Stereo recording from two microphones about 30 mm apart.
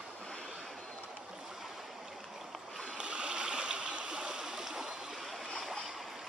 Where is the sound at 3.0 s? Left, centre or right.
Right.